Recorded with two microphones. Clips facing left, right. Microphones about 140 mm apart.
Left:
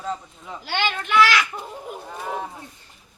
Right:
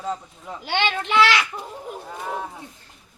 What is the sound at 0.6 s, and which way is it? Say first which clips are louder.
Speech: right 2 dB; 20° right (ahead or behind).